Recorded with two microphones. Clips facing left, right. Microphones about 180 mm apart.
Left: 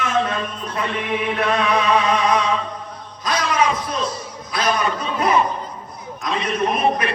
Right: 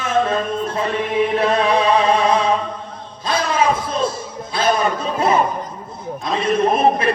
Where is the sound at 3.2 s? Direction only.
30° right (ahead or behind).